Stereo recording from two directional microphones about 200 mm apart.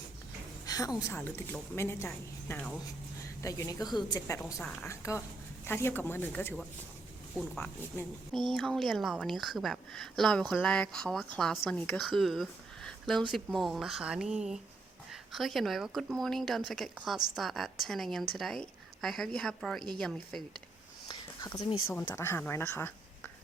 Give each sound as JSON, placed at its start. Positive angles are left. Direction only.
{"t": 0.6, "sound": "a woman's voice", "side_deg": 20}
{"t": 21.1, "sound": "a sound", "side_deg": 20}
{"t": 21.8, "sound": "a woman's voice", "side_deg": 15}